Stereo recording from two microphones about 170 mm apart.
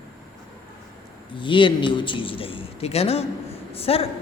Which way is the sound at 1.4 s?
30° left (ahead or behind).